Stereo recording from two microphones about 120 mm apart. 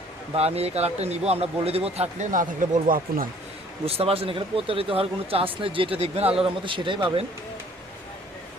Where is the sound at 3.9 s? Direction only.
55° right (ahead or behind).